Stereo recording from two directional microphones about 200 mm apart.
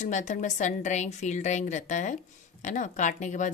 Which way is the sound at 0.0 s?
35° left (ahead or behind).